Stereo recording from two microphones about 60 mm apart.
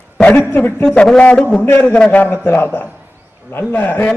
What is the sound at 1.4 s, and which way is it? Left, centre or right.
Speech, centre.